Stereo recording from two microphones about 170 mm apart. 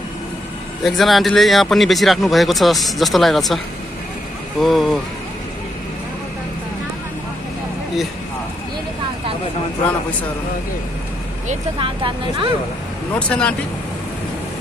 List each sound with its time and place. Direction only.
0.8 s speech: centre (ahead or behind)
11.8 s speech: 30° right (ahead or behind)
13.1 s speech: 10° left (ahead or behind)